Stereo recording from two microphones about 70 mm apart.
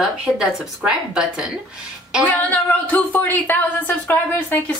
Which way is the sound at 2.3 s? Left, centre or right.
Left.